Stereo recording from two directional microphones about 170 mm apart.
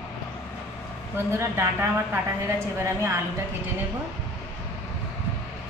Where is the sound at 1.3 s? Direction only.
15° right (ahead or behind).